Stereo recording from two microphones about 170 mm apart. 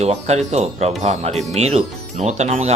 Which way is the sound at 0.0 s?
40° right (ahead or behind).